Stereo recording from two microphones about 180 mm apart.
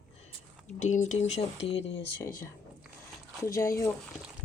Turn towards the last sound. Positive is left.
turn(degrees=15)  # may be behind; listen again after turning